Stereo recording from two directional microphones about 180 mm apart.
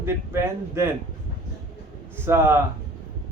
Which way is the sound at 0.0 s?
15° right (ahead or behind).